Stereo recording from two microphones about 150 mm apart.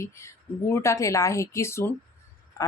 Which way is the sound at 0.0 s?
20° left (ahead or behind).